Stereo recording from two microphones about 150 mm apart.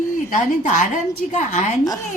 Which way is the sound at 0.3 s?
60° left (ahead or behind).